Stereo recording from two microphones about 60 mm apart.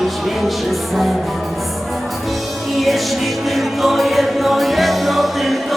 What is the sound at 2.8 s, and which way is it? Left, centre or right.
Music, centre.